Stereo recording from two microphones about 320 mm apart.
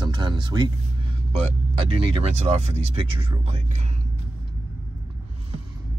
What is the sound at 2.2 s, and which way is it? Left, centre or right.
Speech, centre.